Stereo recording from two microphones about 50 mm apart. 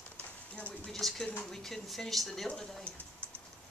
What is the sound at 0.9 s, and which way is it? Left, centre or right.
Speech, centre.